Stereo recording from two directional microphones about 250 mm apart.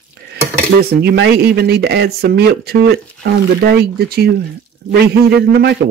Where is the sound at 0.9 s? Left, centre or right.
Right.